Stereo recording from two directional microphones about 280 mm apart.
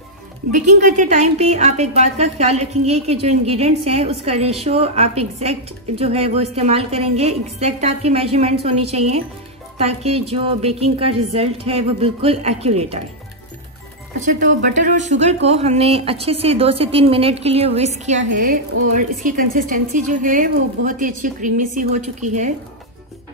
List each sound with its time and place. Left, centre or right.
0.5 s a woman's voice: right
14.3 s a woman's voice: right